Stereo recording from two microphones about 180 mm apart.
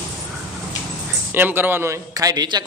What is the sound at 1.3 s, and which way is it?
A man's voice, 10° right (ahead or behind).